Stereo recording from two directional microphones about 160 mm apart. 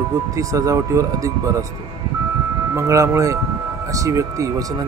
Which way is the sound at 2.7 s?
20° right (ahead or behind).